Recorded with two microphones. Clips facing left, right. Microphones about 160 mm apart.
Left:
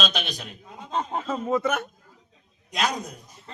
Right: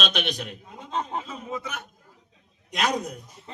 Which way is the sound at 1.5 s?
60° left (ahead or behind).